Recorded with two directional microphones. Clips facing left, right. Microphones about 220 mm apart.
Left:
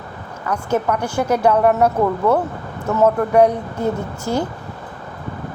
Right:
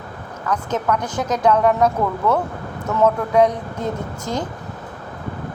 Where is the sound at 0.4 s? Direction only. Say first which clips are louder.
Left 2 dB; 10° left (ahead or behind).